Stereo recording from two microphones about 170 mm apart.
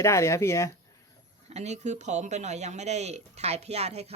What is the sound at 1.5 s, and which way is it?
Speech, 40° right (ahead or behind).